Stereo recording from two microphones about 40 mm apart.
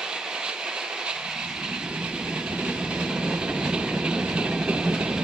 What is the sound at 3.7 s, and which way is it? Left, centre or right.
Train, right.